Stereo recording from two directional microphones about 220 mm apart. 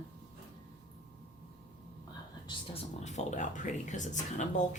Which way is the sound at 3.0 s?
30° left (ahead or behind).